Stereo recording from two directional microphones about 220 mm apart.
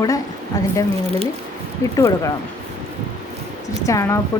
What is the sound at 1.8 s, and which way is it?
Speech, 15° left (ahead or behind).